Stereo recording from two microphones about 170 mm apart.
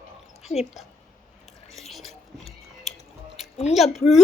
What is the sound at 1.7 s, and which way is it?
Chewing, centre (ahead or behind).